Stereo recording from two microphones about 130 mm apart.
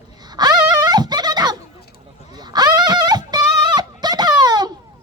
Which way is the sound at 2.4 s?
30° right (ahead or behind).